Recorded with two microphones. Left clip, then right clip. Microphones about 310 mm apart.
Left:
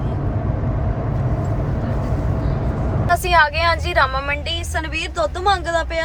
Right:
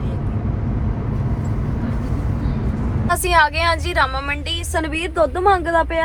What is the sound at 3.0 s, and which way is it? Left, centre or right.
A woman's voice, centre.